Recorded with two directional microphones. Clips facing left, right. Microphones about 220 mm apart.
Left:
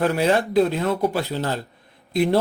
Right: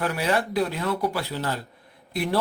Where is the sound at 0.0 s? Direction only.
25° left (ahead or behind).